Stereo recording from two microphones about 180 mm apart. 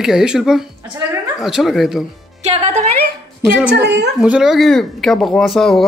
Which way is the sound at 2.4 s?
35° right (ahead or behind).